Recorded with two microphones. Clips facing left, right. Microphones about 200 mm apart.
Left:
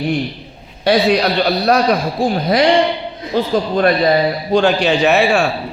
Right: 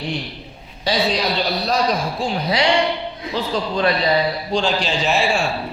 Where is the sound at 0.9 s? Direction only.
65° left (ahead or behind).